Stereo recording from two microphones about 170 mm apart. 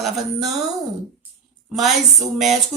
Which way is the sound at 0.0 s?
Centre (ahead or behind).